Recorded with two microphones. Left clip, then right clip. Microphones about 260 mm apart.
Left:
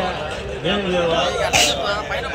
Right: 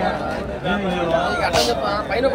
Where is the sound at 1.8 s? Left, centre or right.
Right.